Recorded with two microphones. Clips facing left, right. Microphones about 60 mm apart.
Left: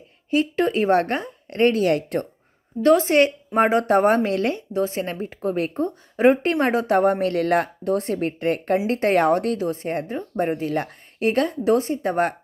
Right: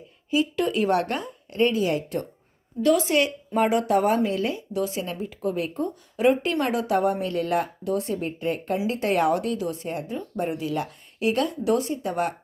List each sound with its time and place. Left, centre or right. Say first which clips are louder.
0.3 s a woman's voice: left 2 dB; left
0.6 s a woman's voice: left 6 dB; left
1.5 s speech: left 4 dB; left
2.8 s a woman's voice: left 5 dB; left
4.7 s a woman's voice: left 4 dB; left